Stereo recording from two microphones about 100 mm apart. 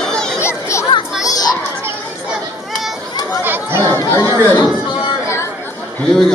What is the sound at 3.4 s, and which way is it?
Chatter, 20° right (ahead or behind).